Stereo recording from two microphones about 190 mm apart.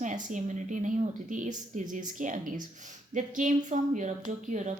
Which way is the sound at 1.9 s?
45° right (ahead or behind).